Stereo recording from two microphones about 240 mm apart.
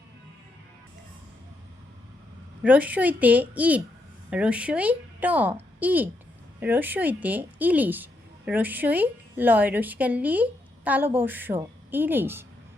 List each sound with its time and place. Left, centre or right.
2.6 s a woman's voice: centre